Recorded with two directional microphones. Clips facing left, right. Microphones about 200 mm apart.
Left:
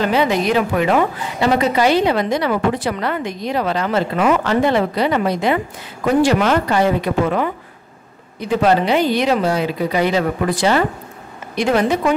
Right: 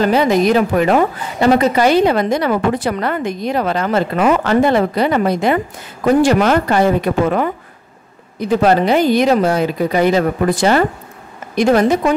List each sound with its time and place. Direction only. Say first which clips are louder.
0.0 s a woman's voice: right 4 dB; 40° right (ahead or behind)